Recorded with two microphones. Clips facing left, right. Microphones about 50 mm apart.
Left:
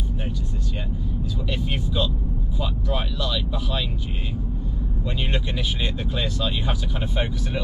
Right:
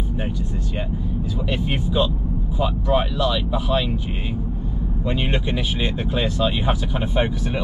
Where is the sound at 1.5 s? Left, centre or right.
Right.